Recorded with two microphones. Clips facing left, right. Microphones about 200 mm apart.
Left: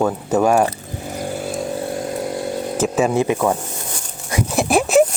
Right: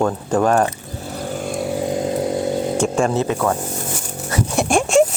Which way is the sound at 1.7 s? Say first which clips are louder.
Right 3 dB; 15° right (ahead or behind).